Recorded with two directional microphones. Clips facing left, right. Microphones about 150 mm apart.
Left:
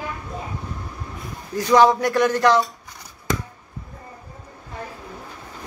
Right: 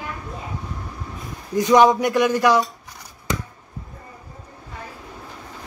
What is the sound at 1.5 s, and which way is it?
Speech, 20° right (ahead or behind).